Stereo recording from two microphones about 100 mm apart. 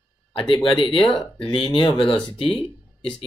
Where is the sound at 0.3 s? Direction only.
60° left (ahead or behind).